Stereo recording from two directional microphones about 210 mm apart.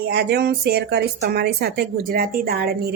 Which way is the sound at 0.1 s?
50° right (ahead or behind).